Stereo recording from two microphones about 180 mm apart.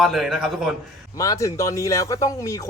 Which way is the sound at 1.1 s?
20° left (ahead or behind).